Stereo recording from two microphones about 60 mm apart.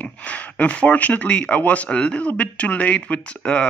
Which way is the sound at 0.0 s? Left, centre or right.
Left.